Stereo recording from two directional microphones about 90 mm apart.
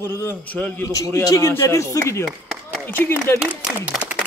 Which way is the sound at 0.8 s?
40° left (ahead or behind).